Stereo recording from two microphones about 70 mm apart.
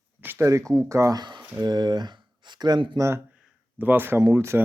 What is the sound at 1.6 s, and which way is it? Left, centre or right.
Speech, right.